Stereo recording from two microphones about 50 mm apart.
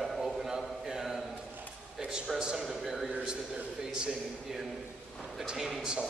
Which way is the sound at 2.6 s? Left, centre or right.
Centre.